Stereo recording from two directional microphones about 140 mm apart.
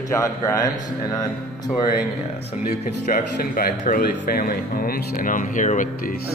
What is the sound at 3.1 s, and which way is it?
Speech, 90° left.